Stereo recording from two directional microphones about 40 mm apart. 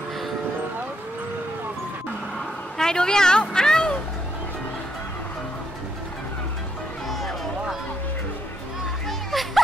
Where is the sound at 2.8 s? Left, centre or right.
Centre.